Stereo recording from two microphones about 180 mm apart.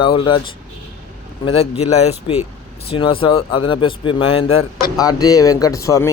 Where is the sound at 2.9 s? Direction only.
30° left (ahead or behind).